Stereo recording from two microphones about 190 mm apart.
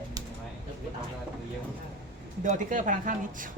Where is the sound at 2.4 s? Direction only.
40° right (ahead or behind).